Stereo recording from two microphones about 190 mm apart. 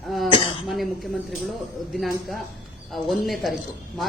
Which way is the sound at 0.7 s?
Centre (ahead or behind).